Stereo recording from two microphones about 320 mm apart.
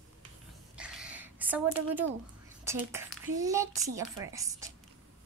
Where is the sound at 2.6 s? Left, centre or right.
Centre.